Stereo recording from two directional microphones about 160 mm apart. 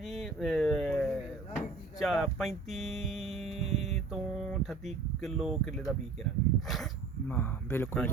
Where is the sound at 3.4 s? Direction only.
40° right (ahead or behind).